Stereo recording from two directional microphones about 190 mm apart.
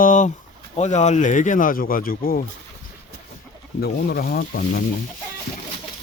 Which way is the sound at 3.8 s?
55° left (ahead or behind).